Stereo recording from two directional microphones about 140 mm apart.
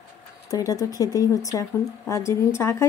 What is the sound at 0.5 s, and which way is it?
Speech, 25° left (ahead or behind).